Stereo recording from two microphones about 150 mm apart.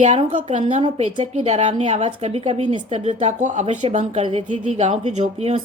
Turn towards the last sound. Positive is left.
turn(degrees=-50)  # may be behind; listen again after turning